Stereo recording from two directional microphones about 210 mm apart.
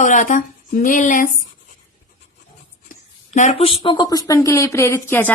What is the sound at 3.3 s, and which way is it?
Speech, 35° left (ahead or behind).